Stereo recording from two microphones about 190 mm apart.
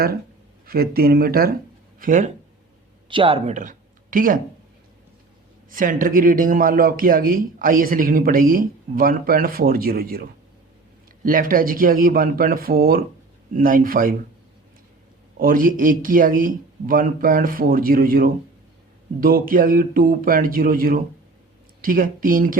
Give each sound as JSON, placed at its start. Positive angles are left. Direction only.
{"t": 0.7, "sound": "a man's voice", "side_deg": -55}
{"t": 3.1, "sound": "speech", "side_deg": -30}
{"t": 5.7, "sound": "a man's voice", "side_deg": -45}
{"t": 15.4, "sound": "a man's voice", "side_deg": -50}